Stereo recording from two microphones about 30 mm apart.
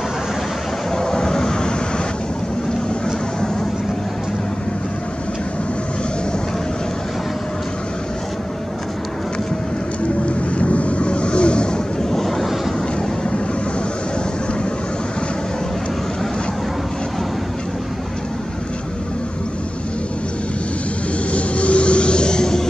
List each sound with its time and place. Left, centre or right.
0.9 s vehicle: left
10.2 s vehicle: left
12.0 s vehicle: centre
21.3 s vehicle: left